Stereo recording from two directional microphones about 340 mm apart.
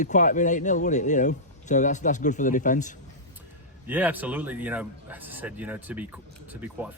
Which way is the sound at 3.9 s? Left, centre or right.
Centre.